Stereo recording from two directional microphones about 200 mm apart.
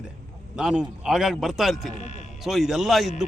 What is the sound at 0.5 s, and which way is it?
A man's voice, 5° right (ahead or behind).